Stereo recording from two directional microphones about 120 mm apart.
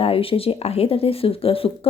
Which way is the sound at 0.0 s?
50° left (ahead or behind).